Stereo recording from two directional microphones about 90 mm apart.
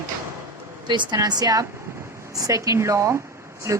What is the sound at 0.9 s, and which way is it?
Speech, 55° right (ahead or behind).